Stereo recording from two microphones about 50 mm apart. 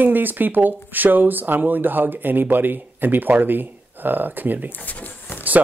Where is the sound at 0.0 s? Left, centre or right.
Right.